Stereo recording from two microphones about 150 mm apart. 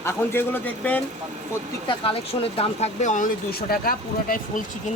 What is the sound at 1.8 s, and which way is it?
Speech, 40° left (ahead or behind).